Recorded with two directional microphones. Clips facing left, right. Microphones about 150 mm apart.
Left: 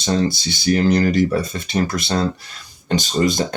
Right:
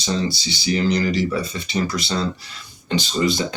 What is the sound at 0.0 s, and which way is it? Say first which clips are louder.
Speech: left 4 dB; 50° left (ahead or behind).